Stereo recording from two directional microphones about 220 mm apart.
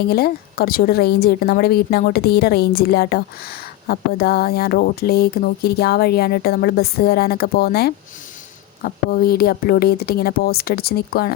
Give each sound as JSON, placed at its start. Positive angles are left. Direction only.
{"t": 0.1, "sound": "speech", "side_deg": 45}